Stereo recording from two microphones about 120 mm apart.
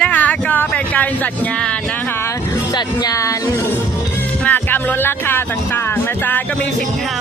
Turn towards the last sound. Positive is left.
turn(degrees=20)  # may be behind; listen again after turning